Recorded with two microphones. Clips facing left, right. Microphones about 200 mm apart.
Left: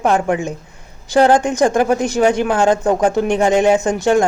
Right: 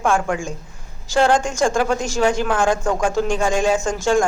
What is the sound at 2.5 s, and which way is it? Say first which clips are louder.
Speech: left 4 dB; 20° left (ahead or behind).